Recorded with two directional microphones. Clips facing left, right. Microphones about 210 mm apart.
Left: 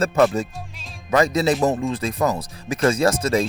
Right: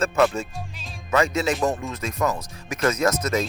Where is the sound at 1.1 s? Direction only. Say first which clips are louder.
Left 4 dB; 35° left (ahead or behind).